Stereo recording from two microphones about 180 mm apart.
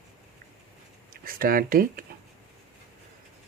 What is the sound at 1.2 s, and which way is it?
Speech, 50° right (ahead or behind).